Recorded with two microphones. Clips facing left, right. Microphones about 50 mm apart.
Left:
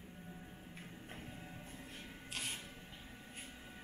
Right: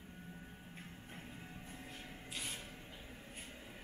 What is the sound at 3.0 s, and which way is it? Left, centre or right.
Vehicle, centre.